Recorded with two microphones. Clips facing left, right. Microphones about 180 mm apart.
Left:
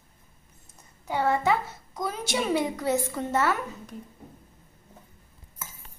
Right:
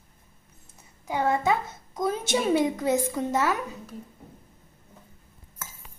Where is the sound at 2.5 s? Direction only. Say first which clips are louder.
Right 2 dB; 20° right (ahead or behind).